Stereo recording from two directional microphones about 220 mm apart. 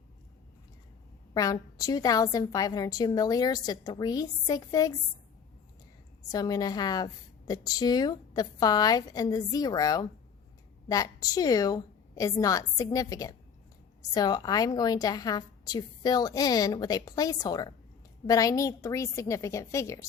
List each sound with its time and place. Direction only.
1.3 s a woman's voice: 15° left (ahead or behind)
6.2 s a woman's voice: 15° left (ahead or behind)